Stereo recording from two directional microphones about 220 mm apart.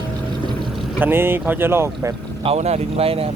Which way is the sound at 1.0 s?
10° right (ahead or behind).